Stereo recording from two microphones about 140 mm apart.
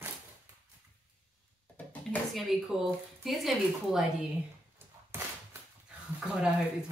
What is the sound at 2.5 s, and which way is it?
Speech, centre (ahead or behind).